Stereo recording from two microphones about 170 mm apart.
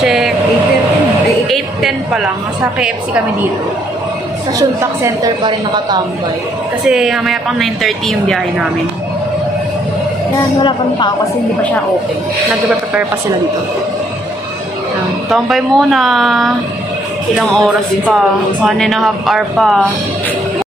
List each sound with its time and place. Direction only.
0.0 s vehicle: centre (ahead or behind)
1.5 s a sound: centre (ahead or behind)
4.6 s speech: 20° right (ahead or behind)
6.9 s speech: 5° right (ahead or behind)
15.2 s speech: centre (ahead or behind)